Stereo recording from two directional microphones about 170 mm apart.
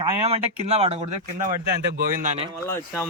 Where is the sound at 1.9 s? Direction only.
50° right (ahead or behind).